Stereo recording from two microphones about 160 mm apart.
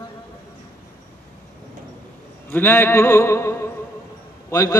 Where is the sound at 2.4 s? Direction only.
10° left (ahead or behind).